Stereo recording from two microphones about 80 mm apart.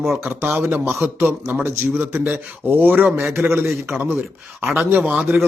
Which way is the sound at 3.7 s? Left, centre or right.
Centre.